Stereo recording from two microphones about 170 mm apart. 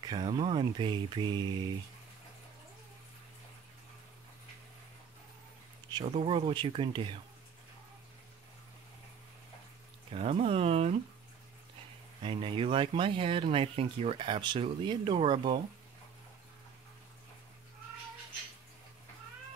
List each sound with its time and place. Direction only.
0.0 s speech: 25° right (ahead or behind)
6.0 s speech: 30° right (ahead or behind)
10.1 s speech: 35° right (ahead or behind)
12.2 s speech: 30° right (ahead or behind)